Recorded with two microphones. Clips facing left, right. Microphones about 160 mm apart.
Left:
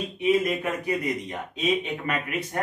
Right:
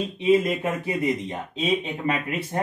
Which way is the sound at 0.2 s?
25° right (ahead or behind).